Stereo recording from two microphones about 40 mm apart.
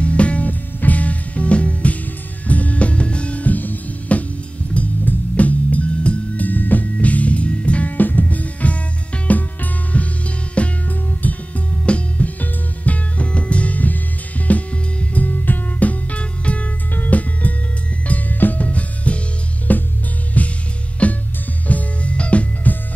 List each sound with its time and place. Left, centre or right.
0.0 s music: left
8.0 s music: left
11.8 s music: left
19.7 s music: left